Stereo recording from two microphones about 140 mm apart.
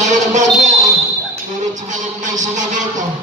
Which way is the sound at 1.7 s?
60° right (ahead or behind).